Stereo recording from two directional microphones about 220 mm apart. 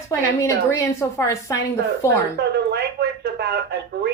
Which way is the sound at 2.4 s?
50° right (ahead or behind).